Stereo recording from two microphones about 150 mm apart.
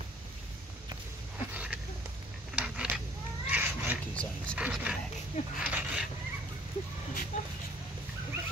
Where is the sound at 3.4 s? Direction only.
10° right (ahead or behind).